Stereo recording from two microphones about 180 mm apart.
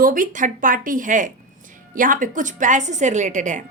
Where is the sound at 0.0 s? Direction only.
50° right (ahead or behind).